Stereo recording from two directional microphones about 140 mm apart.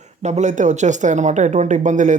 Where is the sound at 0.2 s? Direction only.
55° right (ahead or behind).